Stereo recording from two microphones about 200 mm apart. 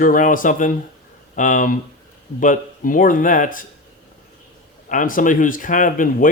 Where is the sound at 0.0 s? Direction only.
40° left (ahead or behind).